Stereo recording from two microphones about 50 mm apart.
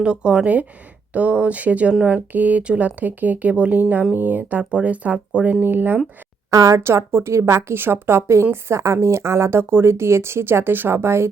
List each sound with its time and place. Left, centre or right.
0.0 s speech: centre
5.5 s speech: right
6.7 s a woman's voice: right
8.6 s a woman's voice: right